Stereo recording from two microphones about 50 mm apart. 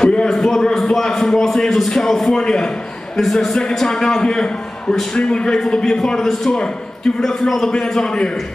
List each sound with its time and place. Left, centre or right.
0.0 s a sound: centre
0.7 s a man's voice: centre
7.7 s a man's voice: centre